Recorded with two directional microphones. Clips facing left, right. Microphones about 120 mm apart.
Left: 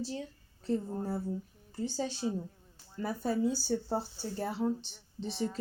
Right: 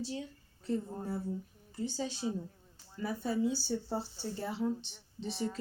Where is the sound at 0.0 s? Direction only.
40° left (ahead or behind).